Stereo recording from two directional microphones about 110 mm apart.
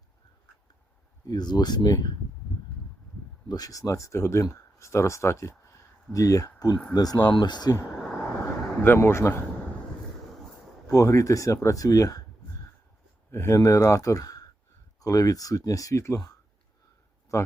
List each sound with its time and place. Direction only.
1.2 s speech: 40° left (ahead or behind)
3.5 s speech: 35° left (ahead or behind)
8.8 s speech: 20° left (ahead or behind)
10.9 s speech: 30° left (ahead or behind)
13.3 s speech: 25° left (ahead or behind)
17.3 s speech: 25° left (ahead or behind)